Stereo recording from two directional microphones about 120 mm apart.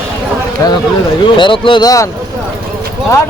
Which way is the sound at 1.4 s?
45° left (ahead or behind).